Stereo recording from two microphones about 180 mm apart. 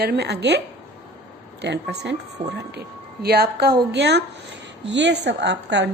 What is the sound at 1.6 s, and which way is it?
Speech, 75° right (ahead or behind).